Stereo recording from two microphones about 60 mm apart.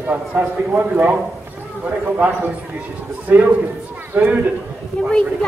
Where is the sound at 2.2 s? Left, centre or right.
Right.